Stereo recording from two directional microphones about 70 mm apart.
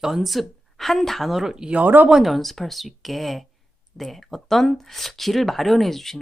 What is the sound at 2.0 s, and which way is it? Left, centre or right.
Speech, centre.